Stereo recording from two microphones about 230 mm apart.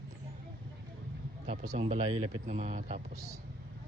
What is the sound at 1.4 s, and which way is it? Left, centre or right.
Speech, right.